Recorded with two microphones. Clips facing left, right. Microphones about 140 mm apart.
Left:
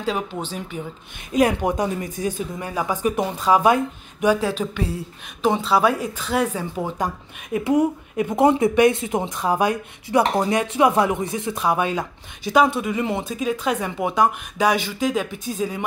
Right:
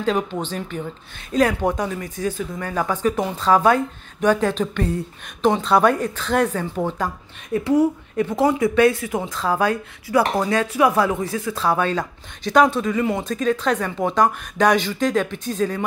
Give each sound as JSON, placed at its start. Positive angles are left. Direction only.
{"t": 0.0, "sound": "speech", "side_deg": 10}